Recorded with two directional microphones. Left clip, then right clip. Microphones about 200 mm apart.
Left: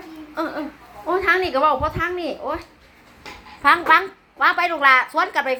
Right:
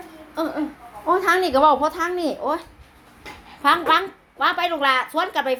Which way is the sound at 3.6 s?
20° right (ahead or behind).